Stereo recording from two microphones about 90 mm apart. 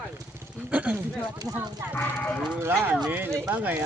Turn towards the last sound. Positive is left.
turn(degrees=-15)  # may be behind; listen again after turning